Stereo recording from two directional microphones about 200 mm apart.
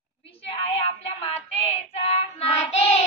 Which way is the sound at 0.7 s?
30° left (ahead or behind).